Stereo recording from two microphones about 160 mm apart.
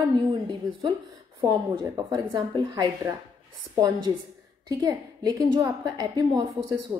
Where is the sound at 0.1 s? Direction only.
30° right (ahead or behind).